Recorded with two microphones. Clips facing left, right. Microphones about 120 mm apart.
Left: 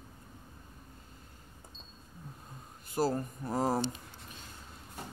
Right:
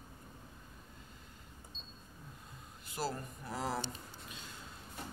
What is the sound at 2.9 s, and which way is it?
Speech, 45° left (ahead or behind).